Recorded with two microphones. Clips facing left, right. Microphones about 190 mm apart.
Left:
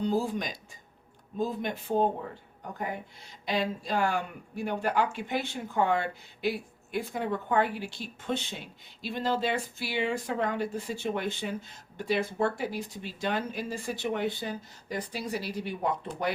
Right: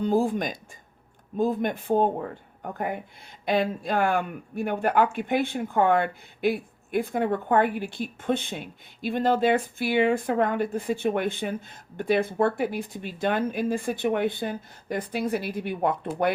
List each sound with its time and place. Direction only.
0.0 s speech: 50° right (ahead or behind)
3.4 s speech: 55° right (ahead or behind)